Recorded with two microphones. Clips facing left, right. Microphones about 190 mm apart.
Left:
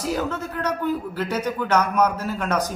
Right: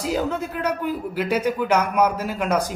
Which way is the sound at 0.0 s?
10° right (ahead or behind).